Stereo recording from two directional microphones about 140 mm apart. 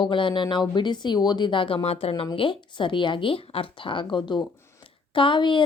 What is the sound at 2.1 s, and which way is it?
Speech, 35° left (ahead or behind).